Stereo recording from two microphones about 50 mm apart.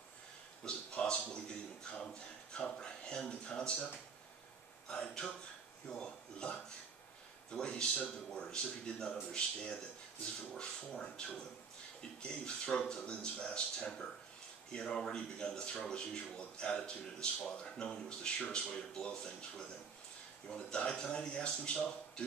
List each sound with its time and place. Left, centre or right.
0.7 s a sound: left
4.8 s a man's voice: centre
11.0 s a man's voice: centre